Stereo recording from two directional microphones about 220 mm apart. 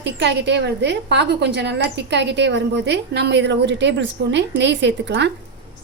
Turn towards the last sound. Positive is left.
turn(degrees=-55)  # may be behind; listen again after turning